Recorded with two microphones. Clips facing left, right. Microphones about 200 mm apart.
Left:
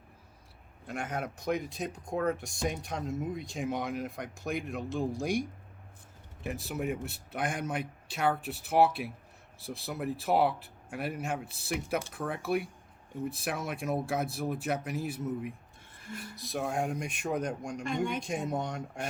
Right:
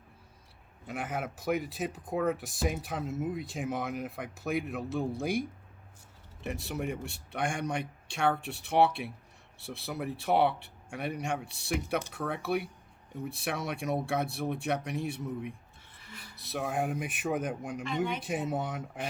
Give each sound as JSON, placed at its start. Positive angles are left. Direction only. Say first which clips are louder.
{"t": 0.9, "sound": "speech", "louder": "even", "side_deg": 0}
{"t": 16.0, "sound": "a sound", "louder": "left 9 dB", "side_deg": 45}
{"t": 16.4, "sound": "speech", "louder": "even", "side_deg": 0}
{"t": 17.8, "sound": "speech", "louder": "even", "side_deg": 45}
{"t": 18.2, "sound": "speech", "louder": "even", "side_deg": -5}